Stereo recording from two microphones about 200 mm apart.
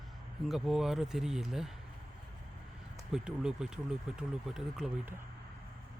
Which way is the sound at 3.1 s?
5° right (ahead or behind).